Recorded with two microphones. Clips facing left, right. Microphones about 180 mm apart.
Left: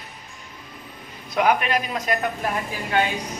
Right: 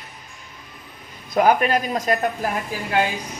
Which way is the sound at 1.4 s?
40° right (ahead or behind).